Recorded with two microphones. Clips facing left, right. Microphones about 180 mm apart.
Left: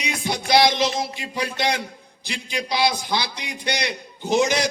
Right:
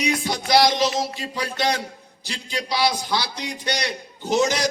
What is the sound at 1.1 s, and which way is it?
A man's voice, 15° left (ahead or behind).